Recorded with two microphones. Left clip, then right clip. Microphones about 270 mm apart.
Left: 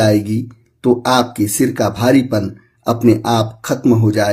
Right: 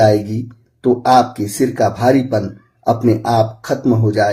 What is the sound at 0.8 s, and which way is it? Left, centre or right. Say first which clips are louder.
Speech: right 2 dB; left.